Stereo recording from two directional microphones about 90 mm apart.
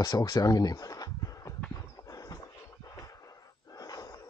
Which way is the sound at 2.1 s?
40° left (ahead or behind).